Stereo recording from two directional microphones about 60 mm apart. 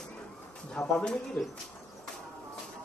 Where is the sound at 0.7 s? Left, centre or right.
Centre.